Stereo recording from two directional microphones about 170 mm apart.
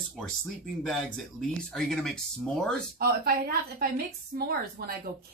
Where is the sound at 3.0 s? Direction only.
60° right (ahead or behind).